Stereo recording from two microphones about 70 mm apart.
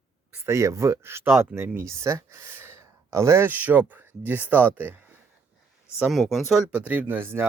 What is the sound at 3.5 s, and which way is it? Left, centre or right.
Speech, right.